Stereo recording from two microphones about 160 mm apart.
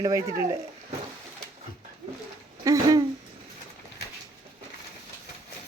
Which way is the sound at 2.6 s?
20° right (ahead or behind).